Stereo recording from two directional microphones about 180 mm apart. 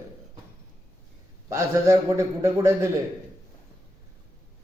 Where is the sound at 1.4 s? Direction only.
15° right (ahead or behind).